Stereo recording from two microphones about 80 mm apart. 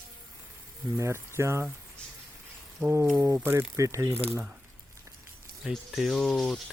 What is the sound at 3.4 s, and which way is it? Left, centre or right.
Mantra, right.